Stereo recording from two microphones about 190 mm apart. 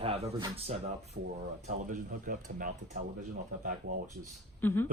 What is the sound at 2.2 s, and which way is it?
Speech, 45° right (ahead or behind).